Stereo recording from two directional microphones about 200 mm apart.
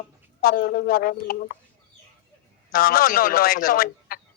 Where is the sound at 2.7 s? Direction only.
45° left (ahead or behind).